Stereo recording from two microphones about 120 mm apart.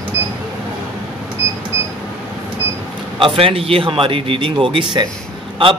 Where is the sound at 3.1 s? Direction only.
50° right (ahead or behind).